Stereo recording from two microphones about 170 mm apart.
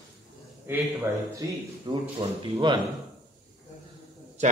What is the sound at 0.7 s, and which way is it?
Speech, 10° right (ahead or behind).